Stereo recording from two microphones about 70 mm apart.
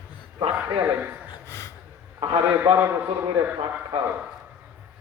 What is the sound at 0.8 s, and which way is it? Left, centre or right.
Speech, right.